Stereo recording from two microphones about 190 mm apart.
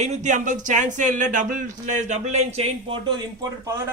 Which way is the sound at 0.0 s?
40° right (ahead or behind).